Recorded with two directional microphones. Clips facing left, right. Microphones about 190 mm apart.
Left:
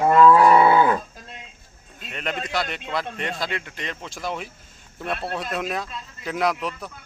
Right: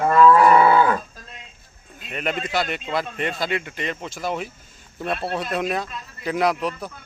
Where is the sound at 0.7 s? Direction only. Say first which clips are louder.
Even; 20° left (ahead or behind).